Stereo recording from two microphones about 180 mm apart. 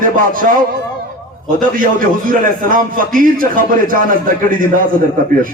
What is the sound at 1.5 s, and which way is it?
A man's voice, 50° right (ahead or behind).